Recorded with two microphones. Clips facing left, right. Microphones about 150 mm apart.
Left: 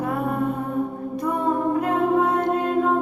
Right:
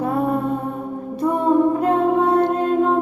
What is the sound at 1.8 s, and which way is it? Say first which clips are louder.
Music: right 3 dB; 30° right (ahead or behind).